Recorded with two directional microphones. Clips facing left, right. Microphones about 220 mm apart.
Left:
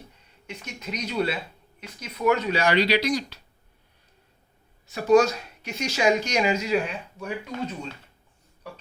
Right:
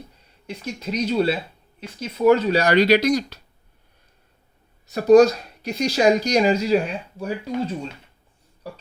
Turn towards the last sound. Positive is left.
turn(degrees=-35)  # may be behind; listen again after turning